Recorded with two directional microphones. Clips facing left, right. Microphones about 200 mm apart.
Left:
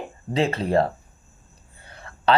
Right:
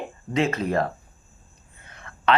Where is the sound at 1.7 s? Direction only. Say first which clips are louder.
Left 2 dB; 30° left (ahead or behind).